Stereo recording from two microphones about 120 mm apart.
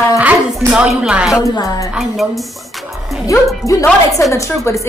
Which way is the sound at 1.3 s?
30° left (ahead or behind).